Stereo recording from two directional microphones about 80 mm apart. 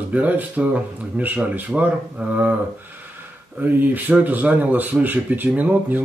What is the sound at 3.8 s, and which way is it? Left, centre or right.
Speech, right.